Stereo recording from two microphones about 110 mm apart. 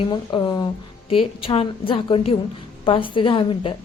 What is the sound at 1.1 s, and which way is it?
A woman's voice, 55° left (ahead or behind).